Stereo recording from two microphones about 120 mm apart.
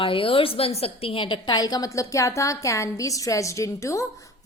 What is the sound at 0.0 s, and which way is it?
A woman's voice, 50° left (ahead or behind).